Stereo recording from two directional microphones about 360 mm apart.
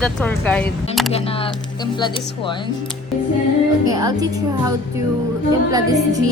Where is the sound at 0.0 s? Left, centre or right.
Centre.